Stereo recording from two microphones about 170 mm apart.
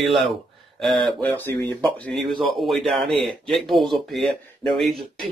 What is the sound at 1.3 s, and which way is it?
Speech, 15° left (ahead or behind).